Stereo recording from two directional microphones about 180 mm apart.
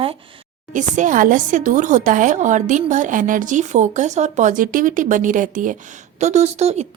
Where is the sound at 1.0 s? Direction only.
45° right (ahead or behind).